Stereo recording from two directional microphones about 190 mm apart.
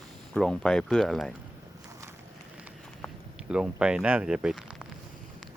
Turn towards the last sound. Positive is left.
turn(degrees=-5)  # may be behind; listen again after turning